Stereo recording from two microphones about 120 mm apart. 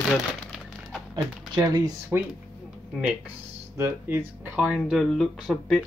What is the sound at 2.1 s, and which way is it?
Speech, 15° right (ahead or behind).